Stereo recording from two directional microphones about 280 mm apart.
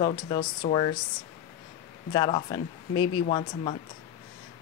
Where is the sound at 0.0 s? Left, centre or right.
Centre.